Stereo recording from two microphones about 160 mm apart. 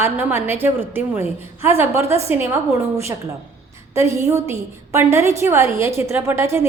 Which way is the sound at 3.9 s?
20° right (ahead or behind).